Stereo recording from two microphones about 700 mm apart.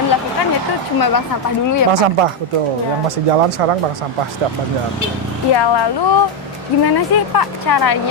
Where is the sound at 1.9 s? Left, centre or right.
Right.